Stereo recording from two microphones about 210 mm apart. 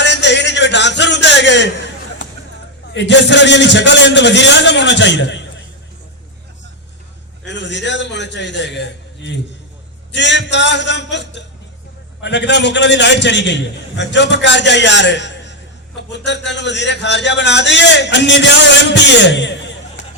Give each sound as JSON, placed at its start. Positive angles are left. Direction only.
{"t": 0.0, "sound": "a sound", "side_deg": 55}
{"t": 2.9, "sound": "a man's voice", "side_deg": 55}
{"t": 7.4, "sound": "a man's voice", "side_deg": 55}